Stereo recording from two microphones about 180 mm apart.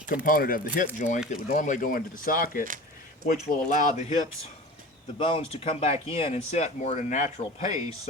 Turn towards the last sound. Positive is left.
turn(degrees=40)  # may be behind; listen again after turning